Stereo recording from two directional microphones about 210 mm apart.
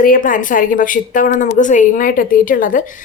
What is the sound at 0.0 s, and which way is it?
A woman's voice, 40° left (ahead or behind).